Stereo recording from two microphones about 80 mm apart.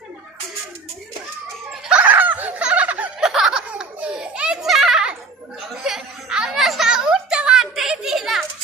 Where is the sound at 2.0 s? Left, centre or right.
Right.